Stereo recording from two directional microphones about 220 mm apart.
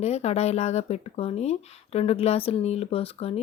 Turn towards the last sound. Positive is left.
turn(degrees=25)  # may be behind; listen again after turning